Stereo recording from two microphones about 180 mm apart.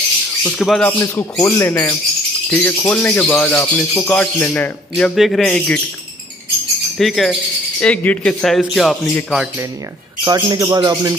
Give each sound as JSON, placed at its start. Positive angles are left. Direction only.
{"t": 0.4, "sound": "music", "side_deg": 0}
{"t": 7.0, "sound": "speech", "side_deg": 0}
{"t": 10.2, "sound": "speech", "side_deg": -20}